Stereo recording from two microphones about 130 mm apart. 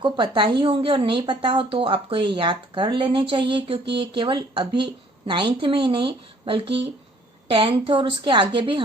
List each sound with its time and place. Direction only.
0.0 s a woman's voice: 40° right (ahead or behind)